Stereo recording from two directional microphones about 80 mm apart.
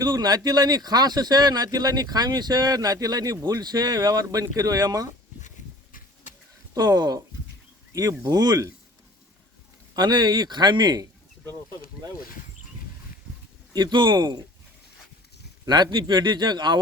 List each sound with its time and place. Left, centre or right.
0.0 s speech: right
6.7 s speech: right
8.3 s speech: right
9.9 s speech: right
13.7 s speech: right
15.6 s speech: right